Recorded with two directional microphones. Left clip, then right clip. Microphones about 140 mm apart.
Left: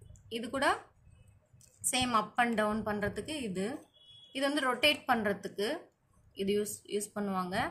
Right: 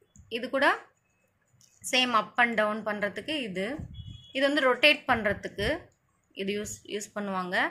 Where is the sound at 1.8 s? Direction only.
25° right (ahead or behind).